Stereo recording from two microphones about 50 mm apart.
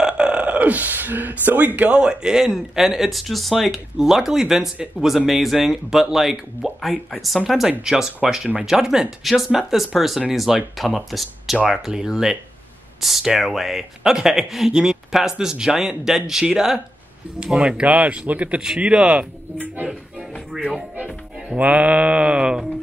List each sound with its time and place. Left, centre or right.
0.0 s burping: centre; by 1.9 s right
1.9 s speech: centre
9.2 s speech: centre
17.6 s mantra: right
18.6 s mantra: centre
21.5 s mantra: right